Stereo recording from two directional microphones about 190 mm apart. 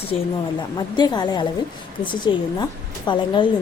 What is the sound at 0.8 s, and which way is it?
A woman's voice, 20° left (ahead or behind).